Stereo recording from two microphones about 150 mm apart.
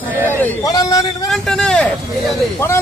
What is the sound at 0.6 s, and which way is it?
Speech, 25° left (ahead or behind).